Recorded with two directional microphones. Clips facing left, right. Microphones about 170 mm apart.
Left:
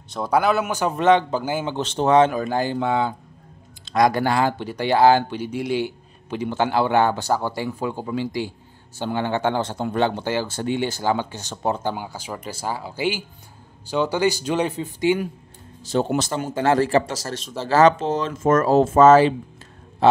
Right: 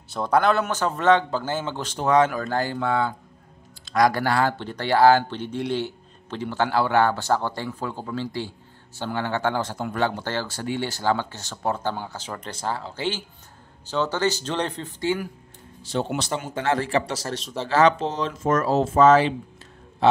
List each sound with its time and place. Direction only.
0.1 s speech: 5° left (ahead or behind)
1.9 s speech: 25° left (ahead or behind)
15.8 s speech: 40° left (ahead or behind)